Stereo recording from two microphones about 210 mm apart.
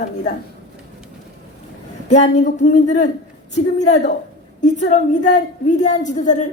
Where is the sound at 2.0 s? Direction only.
35° left (ahead or behind).